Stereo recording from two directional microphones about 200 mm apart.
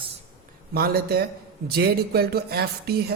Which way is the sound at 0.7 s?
50° right (ahead or behind).